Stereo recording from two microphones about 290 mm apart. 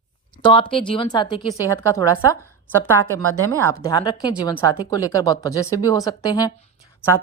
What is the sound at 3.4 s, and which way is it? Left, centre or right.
Speech, centre.